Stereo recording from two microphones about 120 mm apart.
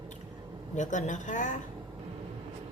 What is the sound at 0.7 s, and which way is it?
Speech, 90° left.